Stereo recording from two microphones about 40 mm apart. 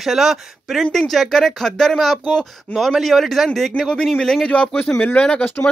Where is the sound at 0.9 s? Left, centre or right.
Centre.